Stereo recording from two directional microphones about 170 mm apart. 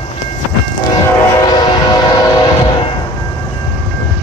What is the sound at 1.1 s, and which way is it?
Train, 25° left (ahead or behind).